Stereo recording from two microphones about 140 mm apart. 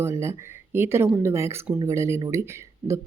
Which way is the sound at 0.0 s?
20° right (ahead or behind).